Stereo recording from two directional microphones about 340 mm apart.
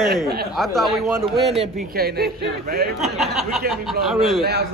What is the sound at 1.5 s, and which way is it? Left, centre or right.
Speech, centre.